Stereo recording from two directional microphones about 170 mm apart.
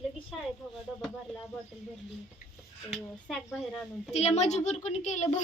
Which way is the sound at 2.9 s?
Centre (ahead or behind).